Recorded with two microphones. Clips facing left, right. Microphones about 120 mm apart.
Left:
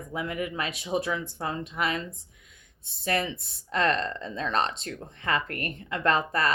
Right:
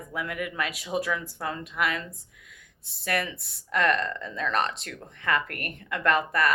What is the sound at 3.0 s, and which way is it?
Speech, 25° left (ahead or behind).